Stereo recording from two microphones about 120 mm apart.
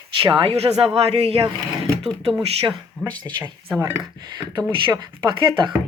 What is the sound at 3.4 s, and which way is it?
Speech, 20° right (ahead or behind).